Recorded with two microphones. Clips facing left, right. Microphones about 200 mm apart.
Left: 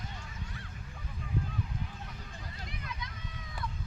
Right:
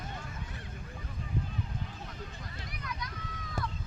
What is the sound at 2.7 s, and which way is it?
Vehicle, 25° left (ahead or behind).